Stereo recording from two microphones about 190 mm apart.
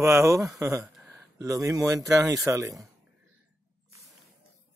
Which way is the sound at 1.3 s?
15° right (ahead or behind).